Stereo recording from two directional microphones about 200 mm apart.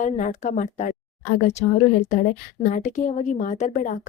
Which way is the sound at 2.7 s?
40° left (ahead or behind).